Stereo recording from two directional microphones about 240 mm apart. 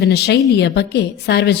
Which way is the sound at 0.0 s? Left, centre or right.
Left.